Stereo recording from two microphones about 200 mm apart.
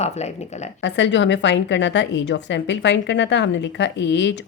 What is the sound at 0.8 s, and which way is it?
A woman's voice, 60° left (ahead or behind).